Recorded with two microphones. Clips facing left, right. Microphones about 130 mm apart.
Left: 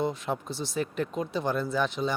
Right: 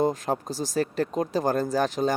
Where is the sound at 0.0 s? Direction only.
40° right (ahead or behind).